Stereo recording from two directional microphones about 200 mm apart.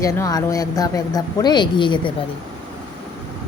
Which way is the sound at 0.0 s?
15° left (ahead or behind).